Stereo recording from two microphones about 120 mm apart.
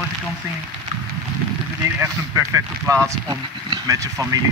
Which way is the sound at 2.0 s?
25° right (ahead or behind).